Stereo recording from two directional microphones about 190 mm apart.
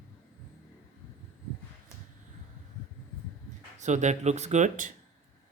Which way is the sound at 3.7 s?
40° right (ahead or behind).